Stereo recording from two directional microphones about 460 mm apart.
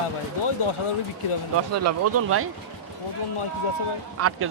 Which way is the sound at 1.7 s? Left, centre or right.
Right.